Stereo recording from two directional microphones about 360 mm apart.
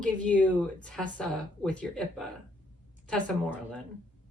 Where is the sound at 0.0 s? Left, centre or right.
Centre.